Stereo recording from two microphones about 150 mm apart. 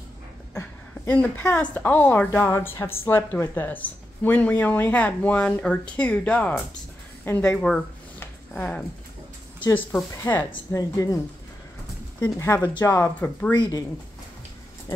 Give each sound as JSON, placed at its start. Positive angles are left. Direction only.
{"t": 0.6, "sound": "a woman's voice", "side_deg": 15}
{"t": 8.5, "sound": "a woman's voice", "side_deg": 5}
{"t": 10.2, "sound": "speech", "side_deg": 20}
{"t": 12.2, "sound": "a woman's voice", "side_deg": 15}
{"t": 12.6, "sound": "speech", "side_deg": 30}
{"t": 12.9, "sound": "a woman's voice", "side_deg": 15}
{"t": 13.6, "sound": "speech", "side_deg": 25}